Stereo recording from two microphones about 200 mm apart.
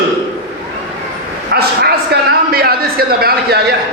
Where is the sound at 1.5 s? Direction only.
55° right (ahead or behind).